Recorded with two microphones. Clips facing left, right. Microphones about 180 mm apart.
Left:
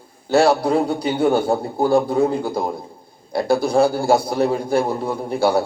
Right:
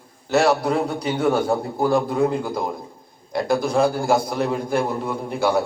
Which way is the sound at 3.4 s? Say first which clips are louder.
Left 3 dB; 30° left (ahead or behind).